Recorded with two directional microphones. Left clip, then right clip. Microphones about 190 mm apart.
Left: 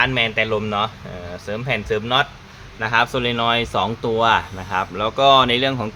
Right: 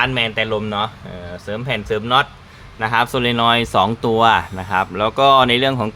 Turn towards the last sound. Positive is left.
turn(degrees=-30)  # may be behind; listen again after turning